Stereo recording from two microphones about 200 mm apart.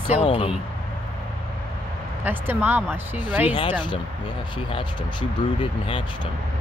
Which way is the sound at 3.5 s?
25° left (ahead or behind).